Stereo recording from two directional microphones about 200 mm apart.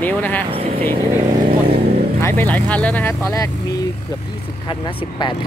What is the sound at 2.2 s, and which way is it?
Speech, 10° left (ahead or behind).